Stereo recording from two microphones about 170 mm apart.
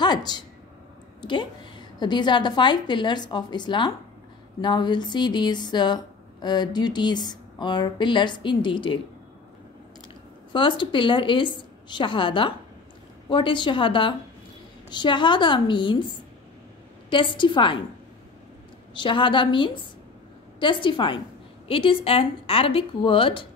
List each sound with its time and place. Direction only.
0.0 s speech: 25° left (ahead or behind)
10.5 s speech: 30° left (ahead or behind)
17.1 s speech: 30° left (ahead or behind)
18.9 s a woman's voice: 30° left (ahead or behind)